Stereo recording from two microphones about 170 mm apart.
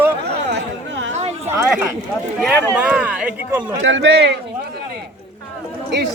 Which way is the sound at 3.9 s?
80° right.